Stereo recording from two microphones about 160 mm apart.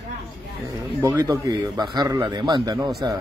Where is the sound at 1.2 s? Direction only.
25° right (ahead or behind).